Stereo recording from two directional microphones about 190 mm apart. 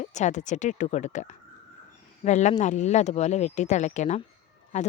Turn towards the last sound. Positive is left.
turn(degrees=40)  # may be behind; listen again after turning